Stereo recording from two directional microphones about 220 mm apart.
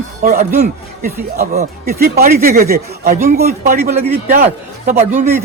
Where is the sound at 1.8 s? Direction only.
45° right (ahead or behind).